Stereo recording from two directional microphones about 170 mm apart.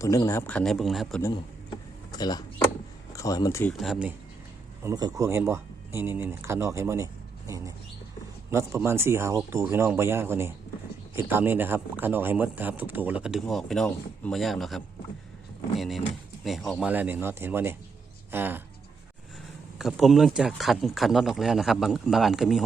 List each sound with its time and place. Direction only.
0.0 s a man's voice: 20° left (ahead or behind); by 1.2 s centre (ahead or behind)
2.1 s speech: 25° left (ahead or behind)
3.8 s speech: centre (ahead or behind)
4.8 s speech: 20° right (ahead or behind); by 14.8 s centre (ahead or behind)
16.4 s speech: centre (ahead or behind)
19.8 s speech: centre (ahead or behind)